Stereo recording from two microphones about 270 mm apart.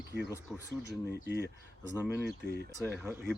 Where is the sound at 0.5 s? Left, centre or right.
Centre.